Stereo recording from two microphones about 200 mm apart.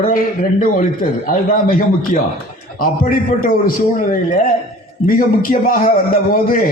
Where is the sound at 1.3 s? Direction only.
45° left (ahead or behind).